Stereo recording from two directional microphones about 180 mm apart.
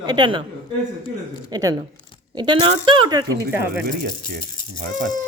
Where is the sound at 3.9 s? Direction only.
50° right (ahead or behind).